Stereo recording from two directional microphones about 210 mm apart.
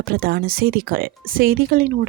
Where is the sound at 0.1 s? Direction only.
45° right (ahead or behind).